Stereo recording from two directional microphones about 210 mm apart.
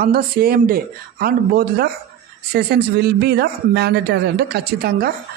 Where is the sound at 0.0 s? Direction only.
45° right (ahead or behind).